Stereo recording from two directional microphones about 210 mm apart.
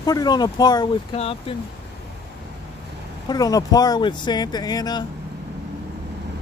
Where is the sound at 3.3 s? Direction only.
15° left (ahead or behind).